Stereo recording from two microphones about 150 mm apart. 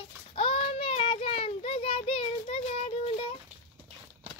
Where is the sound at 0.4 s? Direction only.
40° left (ahead or behind).